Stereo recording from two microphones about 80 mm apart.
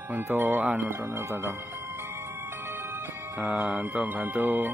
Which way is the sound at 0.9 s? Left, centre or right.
Right.